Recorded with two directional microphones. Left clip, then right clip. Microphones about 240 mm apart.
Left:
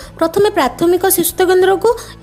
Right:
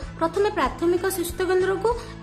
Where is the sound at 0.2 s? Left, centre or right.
Left.